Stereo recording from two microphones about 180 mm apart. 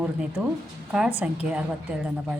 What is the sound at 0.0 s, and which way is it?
A woman's voice, 5° right (ahead or behind).